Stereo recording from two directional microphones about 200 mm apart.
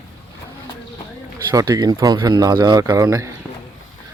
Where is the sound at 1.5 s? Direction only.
20° right (ahead or behind).